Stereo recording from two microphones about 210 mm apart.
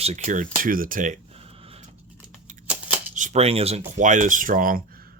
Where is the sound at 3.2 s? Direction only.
30° right (ahead or behind).